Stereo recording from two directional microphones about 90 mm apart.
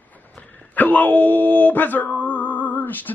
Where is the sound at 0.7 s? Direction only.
20° left (ahead or behind).